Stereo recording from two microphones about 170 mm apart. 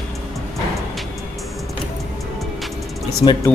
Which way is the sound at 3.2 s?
20° left (ahead or behind).